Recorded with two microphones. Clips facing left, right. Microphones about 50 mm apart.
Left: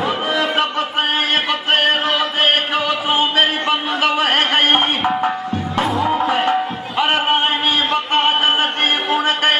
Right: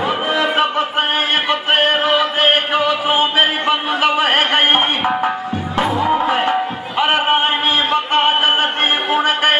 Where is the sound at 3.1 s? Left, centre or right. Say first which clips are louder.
Left 1 dB; centre.